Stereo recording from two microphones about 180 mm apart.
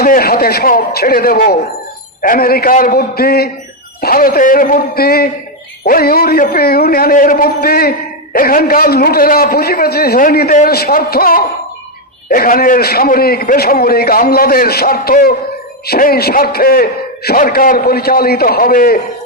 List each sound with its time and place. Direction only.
0.0 s a man's voice: 55° left (ahead or behind)